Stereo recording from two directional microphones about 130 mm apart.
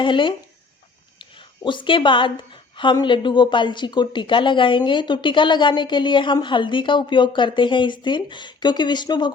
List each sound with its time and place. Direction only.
0.0 s speech: 40° left (ahead or behind)